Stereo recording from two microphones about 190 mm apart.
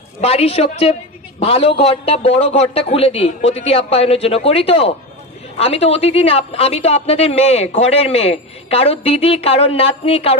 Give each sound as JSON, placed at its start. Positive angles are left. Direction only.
{"t": 0.2, "sound": "a woman's voice", "side_deg": 35}